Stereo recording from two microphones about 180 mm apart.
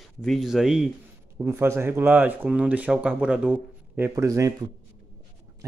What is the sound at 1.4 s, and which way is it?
Speech, 15° right (ahead or behind).